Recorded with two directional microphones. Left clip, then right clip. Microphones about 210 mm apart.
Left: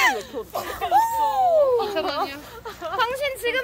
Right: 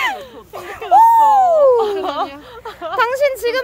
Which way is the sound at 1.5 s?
40° right (ahead or behind).